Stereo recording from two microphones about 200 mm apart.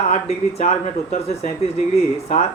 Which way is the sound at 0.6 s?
40° left (ahead or behind).